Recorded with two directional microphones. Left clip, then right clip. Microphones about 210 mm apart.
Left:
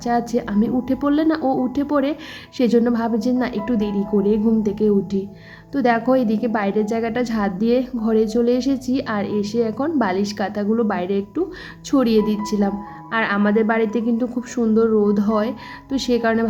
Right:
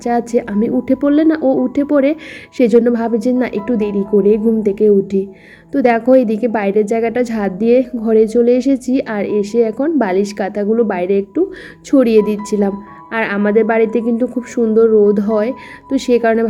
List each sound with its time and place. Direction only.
0.0 s a woman's voice: 15° right (ahead or behind)